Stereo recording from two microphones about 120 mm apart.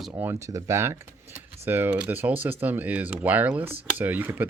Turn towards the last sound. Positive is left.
turn(degrees=-15)  # may be behind; listen again after turning